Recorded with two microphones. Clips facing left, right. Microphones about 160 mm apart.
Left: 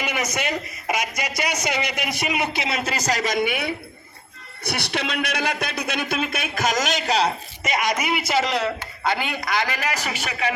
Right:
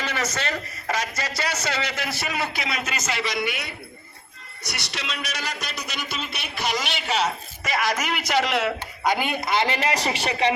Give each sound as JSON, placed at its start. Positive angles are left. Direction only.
{"t": 0.0, "sound": "a man's voice", "side_deg": 15}
{"t": 7.6, "sound": "a man's voice", "side_deg": 20}
{"t": 9.0, "sound": "a man's voice", "side_deg": -15}